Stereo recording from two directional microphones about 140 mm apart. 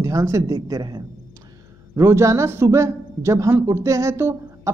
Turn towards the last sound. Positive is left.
turn(degrees=-20)  # may be behind; listen again after turning